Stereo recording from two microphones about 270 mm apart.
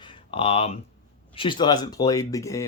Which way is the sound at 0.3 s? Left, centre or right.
Left.